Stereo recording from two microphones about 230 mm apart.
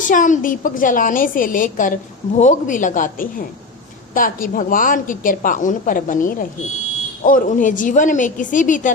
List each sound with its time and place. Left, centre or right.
0.0 s a woman's voice: left